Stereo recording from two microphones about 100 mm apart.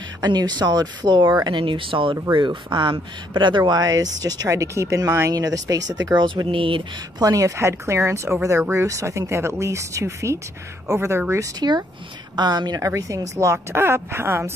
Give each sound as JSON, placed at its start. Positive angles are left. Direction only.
{"t": 0.2, "sound": "speech", "side_deg": -45}
{"t": 7.2, "sound": "speech", "side_deg": -35}
{"t": 12.4, "sound": "speech", "side_deg": -45}